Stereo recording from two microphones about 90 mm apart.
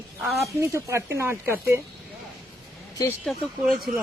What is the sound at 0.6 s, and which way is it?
Speech, 30° right (ahead or behind).